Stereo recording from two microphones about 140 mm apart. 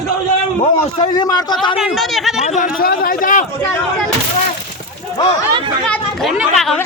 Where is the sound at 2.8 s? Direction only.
90° left; by 3.5 s 70° left (ahead or behind).